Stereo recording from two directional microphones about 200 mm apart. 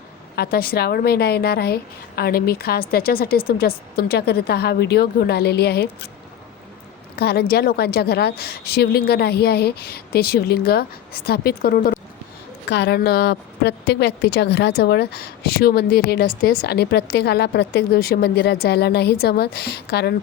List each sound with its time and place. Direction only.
0.3 s a woman's voice: 50° left (ahead or behind)
7.2 s a woman's voice: 50° left (ahead or behind)
12.6 s a woman's voice: 55° left (ahead or behind)